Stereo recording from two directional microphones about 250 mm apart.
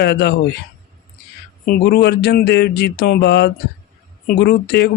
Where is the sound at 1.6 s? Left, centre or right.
Left.